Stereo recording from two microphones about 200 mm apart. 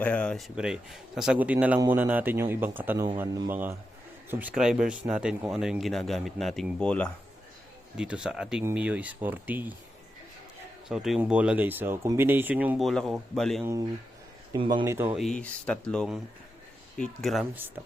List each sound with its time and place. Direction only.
0.0 s speech: 5° left (ahead or behind)
10.8 s speech: centre (ahead or behind)
14.5 s speech: 25° right (ahead or behind)
14.8 s speech: 10° right (ahead or behind)
15.2 s speech: 5° left (ahead or behind)